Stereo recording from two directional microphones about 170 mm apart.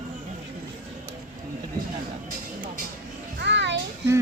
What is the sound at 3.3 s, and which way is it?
Music, 90° right.